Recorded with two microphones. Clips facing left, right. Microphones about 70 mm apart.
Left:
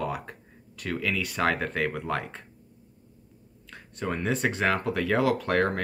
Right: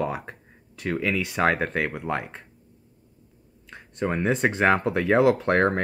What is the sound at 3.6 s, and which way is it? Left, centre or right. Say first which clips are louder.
Speech: right 4 dB; right.